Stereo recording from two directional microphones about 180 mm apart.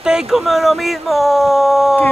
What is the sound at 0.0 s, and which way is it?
Speech, 5° right (ahead or behind).